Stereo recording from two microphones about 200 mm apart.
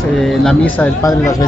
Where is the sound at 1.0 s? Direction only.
15° left (ahead or behind).